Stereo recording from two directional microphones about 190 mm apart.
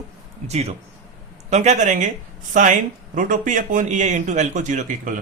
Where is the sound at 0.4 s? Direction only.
35° right (ahead or behind).